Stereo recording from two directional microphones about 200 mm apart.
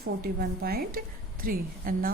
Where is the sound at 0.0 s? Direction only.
50° right (ahead or behind).